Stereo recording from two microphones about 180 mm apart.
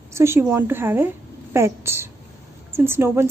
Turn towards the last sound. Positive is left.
turn(degrees=-15)  # may be behind; listen again after turning